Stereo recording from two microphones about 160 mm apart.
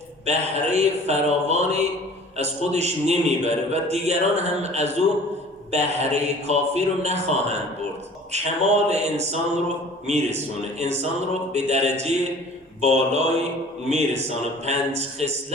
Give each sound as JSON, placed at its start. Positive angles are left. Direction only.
{"t": 0.3, "sound": "a man's voice", "side_deg": -45}